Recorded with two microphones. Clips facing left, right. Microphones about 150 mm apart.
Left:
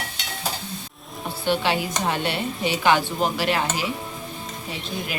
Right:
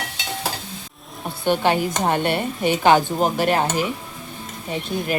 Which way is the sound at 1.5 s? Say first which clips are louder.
Right 4 dB; 50° right (ahead or behind).